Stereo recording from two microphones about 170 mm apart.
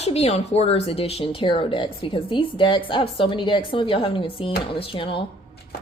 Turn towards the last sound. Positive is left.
turn(degrees=30)  # may be behind; listen again after turning